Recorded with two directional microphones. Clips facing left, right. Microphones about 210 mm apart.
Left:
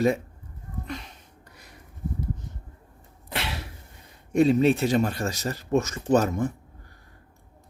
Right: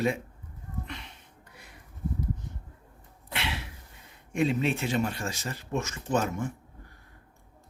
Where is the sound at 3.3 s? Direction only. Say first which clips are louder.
Left 2 dB; 40° left (ahead or behind).